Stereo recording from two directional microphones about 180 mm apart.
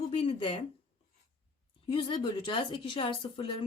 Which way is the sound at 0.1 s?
35° left (ahead or behind).